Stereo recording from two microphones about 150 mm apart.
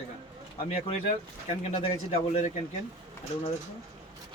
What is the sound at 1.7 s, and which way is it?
Speech, 40° left (ahead or behind).